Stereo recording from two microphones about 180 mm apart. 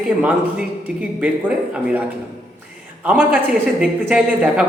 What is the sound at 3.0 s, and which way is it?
A woman's voice, 5° right (ahead or behind).